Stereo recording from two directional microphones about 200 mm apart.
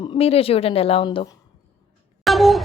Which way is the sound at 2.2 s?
Centre (ahead or behind).